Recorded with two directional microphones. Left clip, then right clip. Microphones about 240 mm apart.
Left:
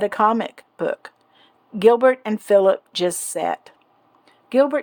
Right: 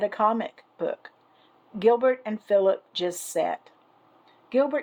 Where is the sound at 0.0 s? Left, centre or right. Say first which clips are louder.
Left 5 dB; left.